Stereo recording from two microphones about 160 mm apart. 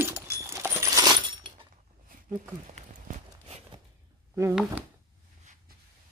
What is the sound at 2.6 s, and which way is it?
Run, 50° right (ahead or behind).